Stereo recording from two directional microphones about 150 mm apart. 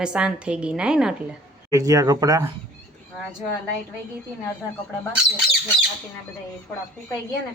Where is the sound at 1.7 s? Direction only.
20° right (ahead or behind).